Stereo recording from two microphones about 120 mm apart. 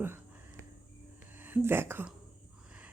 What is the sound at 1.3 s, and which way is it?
Speech, 15° right (ahead or behind).